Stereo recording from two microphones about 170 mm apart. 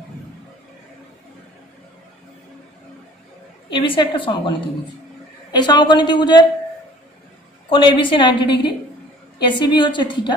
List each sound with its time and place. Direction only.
3.7 s a woman's voice: 30° left (ahead or behind)
7.7 s a woman's voice: 30° left (ahead or behind)